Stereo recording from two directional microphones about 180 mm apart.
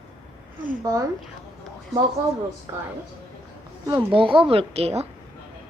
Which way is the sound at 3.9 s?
25° right (ahead or behind).